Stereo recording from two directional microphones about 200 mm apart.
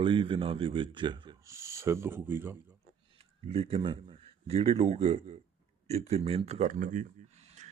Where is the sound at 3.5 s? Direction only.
30° right (ahead or behind).